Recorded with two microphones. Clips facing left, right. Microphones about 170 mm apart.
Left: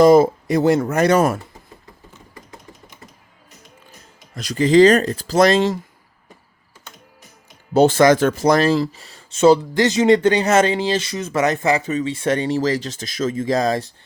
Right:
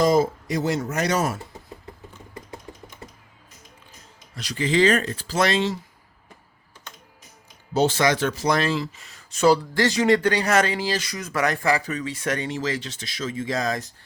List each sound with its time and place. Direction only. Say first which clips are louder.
0.0 s speech: left 8 dB; 65° left (ahead or behind)
4.4 s speech: left 9 dB; 45° left (ahead or behind)
7.7 s speech: left 8 dB; 50° left (ahead or behind); by 13.9 s 30° left (ahead or behind)